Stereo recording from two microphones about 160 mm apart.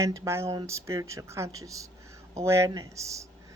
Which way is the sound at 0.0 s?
15° right (ahead or behind).